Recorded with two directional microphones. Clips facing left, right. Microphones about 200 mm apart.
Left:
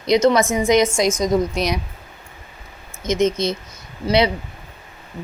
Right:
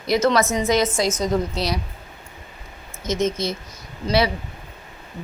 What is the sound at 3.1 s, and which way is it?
Speech, 15° left (ahead or behind).